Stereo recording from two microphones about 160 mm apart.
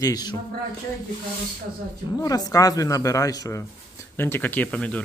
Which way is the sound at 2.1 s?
25° left (ahead or behind).